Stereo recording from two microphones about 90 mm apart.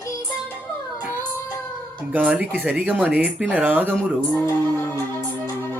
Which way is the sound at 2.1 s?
15° right (ahead or behind).